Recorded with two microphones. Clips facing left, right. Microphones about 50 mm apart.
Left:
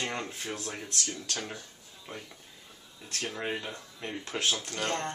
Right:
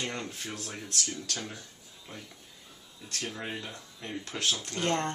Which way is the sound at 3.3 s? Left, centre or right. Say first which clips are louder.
Left 3 dB; centre.